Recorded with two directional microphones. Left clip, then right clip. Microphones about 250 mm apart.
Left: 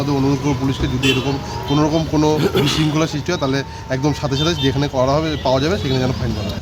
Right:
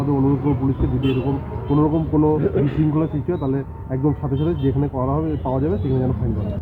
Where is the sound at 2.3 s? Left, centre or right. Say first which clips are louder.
Left 3 dB; left.